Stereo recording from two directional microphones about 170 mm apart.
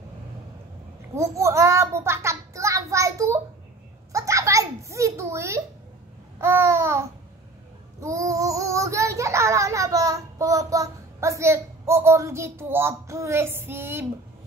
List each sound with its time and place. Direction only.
1.1 s a child's voice: 15° right (ahead or behind)
4.1 s a sound: 20° right (ahead or behind)
6.4 s babbling: 15° right (ahead or behind)
8.0 s child singing: 20° right (ahead or behind)